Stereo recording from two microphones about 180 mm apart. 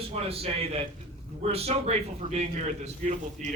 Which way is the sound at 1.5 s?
35° right (ahead or behind).